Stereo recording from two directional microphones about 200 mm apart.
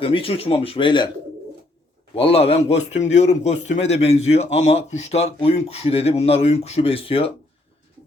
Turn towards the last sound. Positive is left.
turn(degrees=30)  # may be behind; listen again after turning